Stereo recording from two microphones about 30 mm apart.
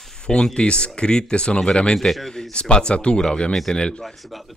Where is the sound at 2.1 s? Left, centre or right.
Centre.